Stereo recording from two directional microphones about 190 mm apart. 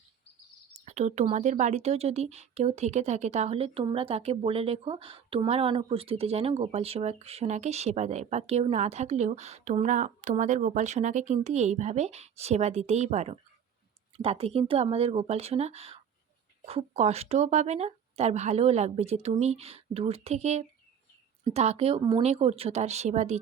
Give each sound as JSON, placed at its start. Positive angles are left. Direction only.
{"t": 0.9, "sound": "speech", "side_deg": -35}